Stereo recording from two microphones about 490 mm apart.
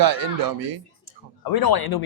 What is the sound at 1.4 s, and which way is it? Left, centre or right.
Speech, left.